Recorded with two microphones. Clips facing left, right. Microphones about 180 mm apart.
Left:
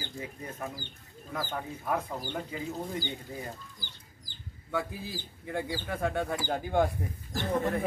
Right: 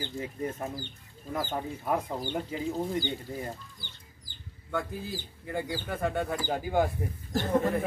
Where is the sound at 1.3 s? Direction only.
25° right (ahead or behind).